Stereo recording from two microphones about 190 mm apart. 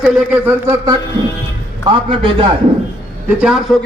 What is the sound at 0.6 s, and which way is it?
A man's voice, 20° right (ahead or behind).